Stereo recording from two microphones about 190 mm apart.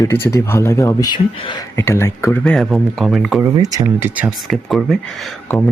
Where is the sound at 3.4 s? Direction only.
20° right (ahead or behind).